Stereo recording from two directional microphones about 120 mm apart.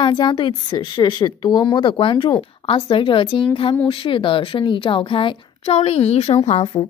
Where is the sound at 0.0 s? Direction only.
40° left (ahead or behind); by 6.6 s 60° left (ahead or behind).